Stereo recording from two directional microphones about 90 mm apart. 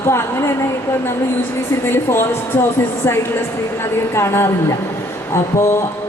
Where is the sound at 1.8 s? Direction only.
25° left (ahead or behind).